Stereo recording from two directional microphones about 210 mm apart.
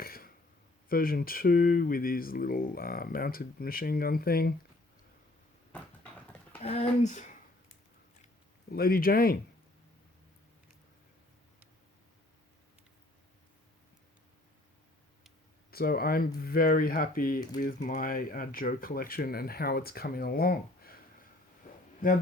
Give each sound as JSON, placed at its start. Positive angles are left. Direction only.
{"t": 0.0, "sound": "a sound", "side_deg": 45}
{"t": 0.9, "sound": "speech", "side_deg": 45}
{"t": 6.6, "sound": "speech", "side_deg": 30}
{"t": 8.7, "sound": "speech", "side_deg": 45}
{"t": 15.7, "sound": "speech", "side_deg": 45}
{"t": 22.0, "sound": "speech", "side_deg": 40}